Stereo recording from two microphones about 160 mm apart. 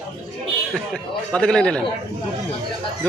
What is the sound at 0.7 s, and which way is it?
A man's voice, 5° left (ahead or behind).